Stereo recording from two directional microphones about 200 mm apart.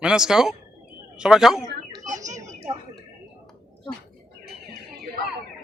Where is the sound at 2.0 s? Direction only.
40° right (ahead or behind).